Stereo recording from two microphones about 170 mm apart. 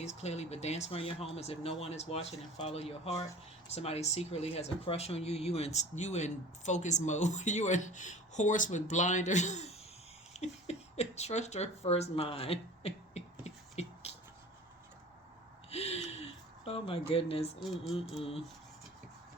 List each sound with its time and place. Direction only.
0.0 s speech: 40° left (ahead or behind)
13.4 s a sound: 40° left (ahead or behind)
15.7 s a sound: 40° left (ahead or behind)
17.1 s speech: 35° left (ahead or behind)
17.6 s speech: centre (ahead or behind)
18.1 s speech: 35° left (ahead or behind)